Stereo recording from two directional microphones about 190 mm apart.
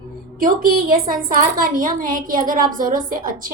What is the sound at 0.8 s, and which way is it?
A woman's voice, 50° right (ahead or behind).